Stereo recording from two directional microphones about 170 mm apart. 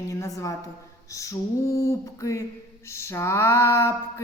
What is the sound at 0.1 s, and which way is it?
Speech, 20° left (ahead or behind).